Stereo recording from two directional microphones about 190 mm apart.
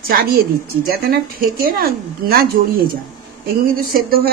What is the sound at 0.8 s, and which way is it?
Speech, 50° right (ahead or behind).